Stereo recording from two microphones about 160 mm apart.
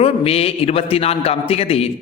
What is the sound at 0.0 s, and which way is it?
A man's voice, 40° left (ahead or behind).